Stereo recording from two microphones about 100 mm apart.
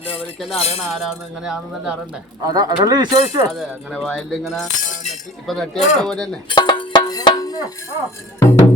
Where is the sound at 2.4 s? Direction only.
40° right (ahead or behind).